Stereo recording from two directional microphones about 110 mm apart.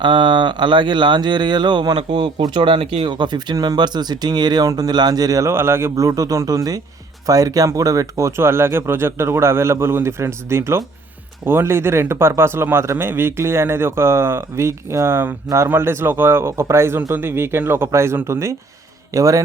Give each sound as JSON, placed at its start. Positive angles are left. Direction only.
{"t": 0.0, "sound": "speech", "side_deg": -45}
{"t": 3.1, "sound": "speech", "side_deg": -45}